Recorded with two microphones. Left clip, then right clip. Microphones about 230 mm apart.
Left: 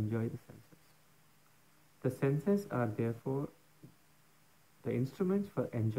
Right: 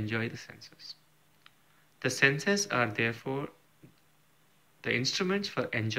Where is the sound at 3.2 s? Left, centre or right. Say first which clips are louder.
Right 3 dB; centre.